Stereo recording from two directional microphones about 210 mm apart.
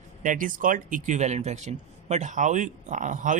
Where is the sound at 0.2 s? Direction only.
40° right (ahead or behind).